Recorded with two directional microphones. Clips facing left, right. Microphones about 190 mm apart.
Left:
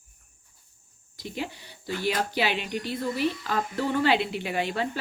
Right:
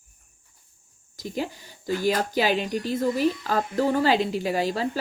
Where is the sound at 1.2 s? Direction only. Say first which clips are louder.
Right 4 dB; 40° right (ahead or behind).